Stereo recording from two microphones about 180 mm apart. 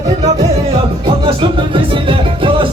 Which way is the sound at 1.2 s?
30° right (ahead or behind).